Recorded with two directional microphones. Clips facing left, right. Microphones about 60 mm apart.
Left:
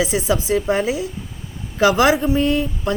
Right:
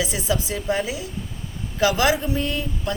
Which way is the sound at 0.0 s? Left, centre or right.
Left.